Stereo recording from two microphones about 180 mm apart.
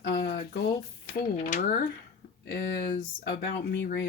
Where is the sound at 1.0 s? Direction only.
50° left (ahead or behind).